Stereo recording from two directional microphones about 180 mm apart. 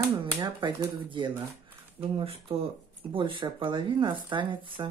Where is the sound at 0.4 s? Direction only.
25° right (ahead or behind).